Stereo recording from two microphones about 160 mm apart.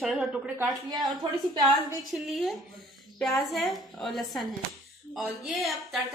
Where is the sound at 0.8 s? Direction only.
25° right (ahead or behind).